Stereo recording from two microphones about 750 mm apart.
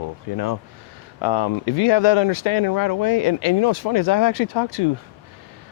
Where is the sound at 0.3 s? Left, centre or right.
Left.